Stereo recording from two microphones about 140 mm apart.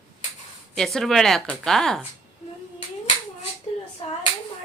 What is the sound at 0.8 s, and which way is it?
Speech, centre (ahead or behind).